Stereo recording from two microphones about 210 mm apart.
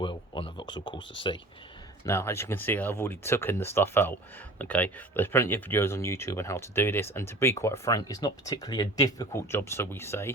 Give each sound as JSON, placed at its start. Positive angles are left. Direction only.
{"t": 0.0, "sound": "speech", "side_deg": 25}